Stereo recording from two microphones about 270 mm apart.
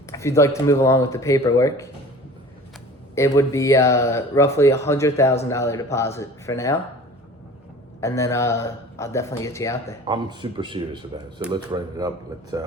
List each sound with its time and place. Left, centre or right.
0.1 s speech: centre
3.2 s speech: centre
8.0 s speech: centre
10.1 s speech: centre